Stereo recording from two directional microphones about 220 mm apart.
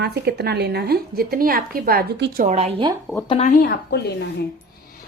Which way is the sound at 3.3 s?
30° left (ahead or behind).